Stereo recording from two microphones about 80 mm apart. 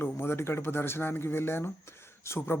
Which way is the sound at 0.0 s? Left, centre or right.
Left.